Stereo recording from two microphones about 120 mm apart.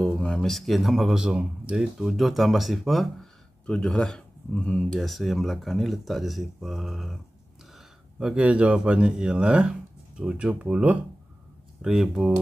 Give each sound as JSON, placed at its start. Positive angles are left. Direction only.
{"t": 0.0, "sound": "speech", "side_deg": 5}